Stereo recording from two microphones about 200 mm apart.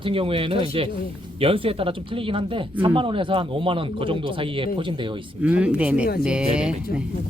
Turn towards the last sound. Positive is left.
turn(degrees=-5)  # may be behind; listen again after turning